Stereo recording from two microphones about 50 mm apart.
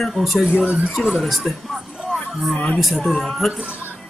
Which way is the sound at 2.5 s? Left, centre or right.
Centre.